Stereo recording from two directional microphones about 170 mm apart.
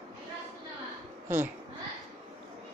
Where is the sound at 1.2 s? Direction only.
10° right (ahead or behind).